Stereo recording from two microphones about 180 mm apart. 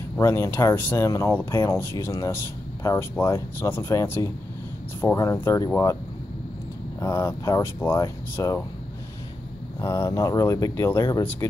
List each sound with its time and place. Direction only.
0.2 s speech: 15° left (ahead or behind)
7.0 s speech: 15° left (ahead or behind)
9.8 s speech: 15° left (ahead or behind)